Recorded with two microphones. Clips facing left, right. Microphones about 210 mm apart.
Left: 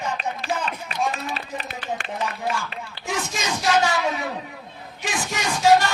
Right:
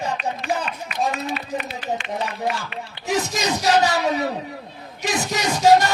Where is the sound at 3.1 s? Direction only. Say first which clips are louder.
Right 5 dB; 40° right (ahead or behind).